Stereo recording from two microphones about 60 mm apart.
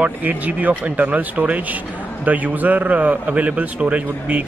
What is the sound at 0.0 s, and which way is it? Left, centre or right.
A man's voice, right.